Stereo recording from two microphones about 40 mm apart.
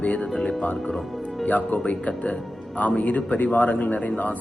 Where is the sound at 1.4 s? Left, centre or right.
Left.